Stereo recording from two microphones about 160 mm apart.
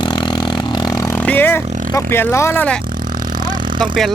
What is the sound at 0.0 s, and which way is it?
Vehicle, 30° left (ahead or behind).